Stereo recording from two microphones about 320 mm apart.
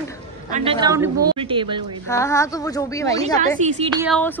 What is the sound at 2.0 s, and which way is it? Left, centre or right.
A woman's voice, centre.